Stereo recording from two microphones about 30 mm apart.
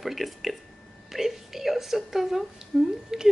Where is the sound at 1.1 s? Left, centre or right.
Centre.